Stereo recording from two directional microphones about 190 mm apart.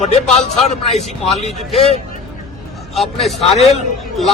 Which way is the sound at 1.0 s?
Centre (ahead or behind).